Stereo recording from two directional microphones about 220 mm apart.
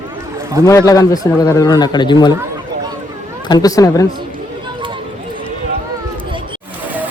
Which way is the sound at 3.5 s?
15° left (ahead or behind).